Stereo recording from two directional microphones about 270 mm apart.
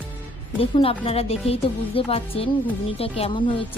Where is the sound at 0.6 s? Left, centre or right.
Left.